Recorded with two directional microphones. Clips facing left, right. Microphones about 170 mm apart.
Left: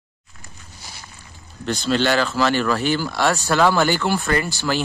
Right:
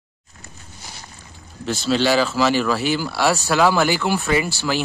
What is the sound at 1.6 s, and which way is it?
Speech, 5° right (ahead or behind).